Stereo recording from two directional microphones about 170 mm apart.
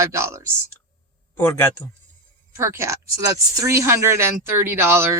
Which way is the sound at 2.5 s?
15° right (ahead or behind).